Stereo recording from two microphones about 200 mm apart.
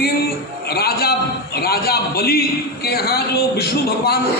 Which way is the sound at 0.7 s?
50° left (ahead or behind).